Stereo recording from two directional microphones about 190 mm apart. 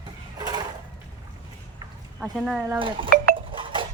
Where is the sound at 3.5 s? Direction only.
25° right (ahead or behind).